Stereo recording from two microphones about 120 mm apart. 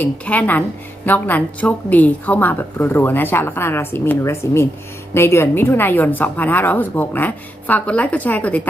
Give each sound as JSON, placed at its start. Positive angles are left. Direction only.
{"t": 0.0, "sound": "a woman's voice", "side_deg": 15}